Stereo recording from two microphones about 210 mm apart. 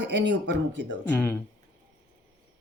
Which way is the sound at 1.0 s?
10° left (ahead or behind).